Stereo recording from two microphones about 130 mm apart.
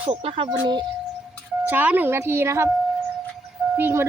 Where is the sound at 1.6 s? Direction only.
15° right (ahead or behind).